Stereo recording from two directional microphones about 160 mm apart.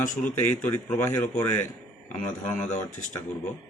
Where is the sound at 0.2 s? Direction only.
10° left (ahead or behind).